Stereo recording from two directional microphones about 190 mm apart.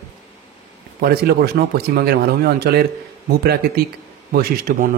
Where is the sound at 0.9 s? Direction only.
55° right (ahead or behind).